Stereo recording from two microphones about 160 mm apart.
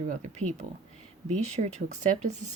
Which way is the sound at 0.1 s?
50° right (ahead or behind).